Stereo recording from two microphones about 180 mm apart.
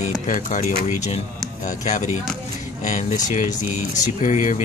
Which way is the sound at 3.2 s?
40° left (ahead or behind).